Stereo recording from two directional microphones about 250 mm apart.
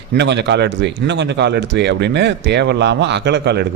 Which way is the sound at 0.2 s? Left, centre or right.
Right.